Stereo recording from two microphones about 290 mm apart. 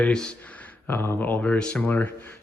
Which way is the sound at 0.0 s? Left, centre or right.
Centre.